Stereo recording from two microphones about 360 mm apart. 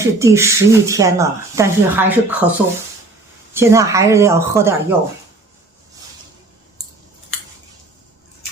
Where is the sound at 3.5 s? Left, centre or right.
Centre.